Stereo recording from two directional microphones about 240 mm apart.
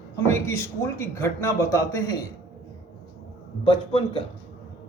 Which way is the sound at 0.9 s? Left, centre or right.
Centre.